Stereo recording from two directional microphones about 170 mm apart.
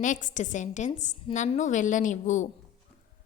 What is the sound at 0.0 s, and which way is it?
A woman's voice, 50° left (ahead or behind).